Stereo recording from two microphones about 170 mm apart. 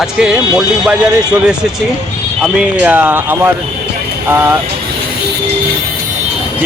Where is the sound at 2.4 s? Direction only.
5° right (ahead or behind).